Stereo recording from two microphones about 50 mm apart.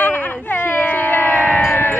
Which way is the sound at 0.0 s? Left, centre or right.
Left.